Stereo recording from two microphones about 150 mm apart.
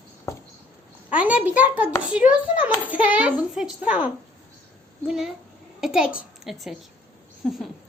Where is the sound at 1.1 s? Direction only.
10° right (ahead or behind).